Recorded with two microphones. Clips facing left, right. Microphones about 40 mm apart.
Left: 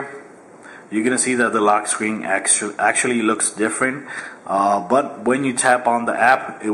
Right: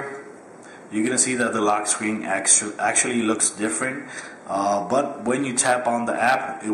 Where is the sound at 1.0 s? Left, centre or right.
Centre.